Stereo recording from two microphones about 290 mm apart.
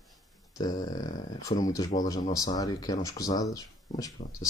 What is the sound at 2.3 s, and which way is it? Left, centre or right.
A man's voice, centre.